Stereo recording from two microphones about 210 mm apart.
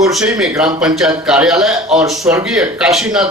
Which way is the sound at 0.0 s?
Centre (ahead or behind).